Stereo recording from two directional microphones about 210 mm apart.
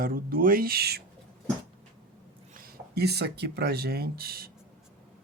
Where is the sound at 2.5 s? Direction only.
50° right (ahead or behind).